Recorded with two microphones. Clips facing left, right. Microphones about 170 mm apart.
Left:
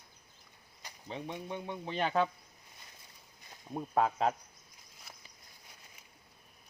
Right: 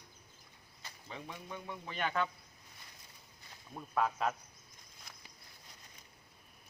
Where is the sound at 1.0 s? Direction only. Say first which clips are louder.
Left 7 dB; 30° left (ahead or behind).